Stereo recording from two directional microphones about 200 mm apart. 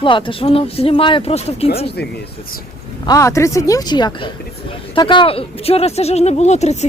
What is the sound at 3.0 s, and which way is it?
Speech, 15° left (ahead or behind).